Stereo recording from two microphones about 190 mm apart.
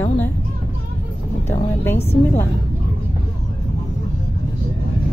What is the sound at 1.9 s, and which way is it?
Speech, 35° left (ahead or behind).